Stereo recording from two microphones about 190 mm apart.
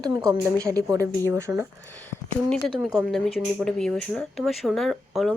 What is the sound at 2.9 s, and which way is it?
Speech, centre (ahead or behind).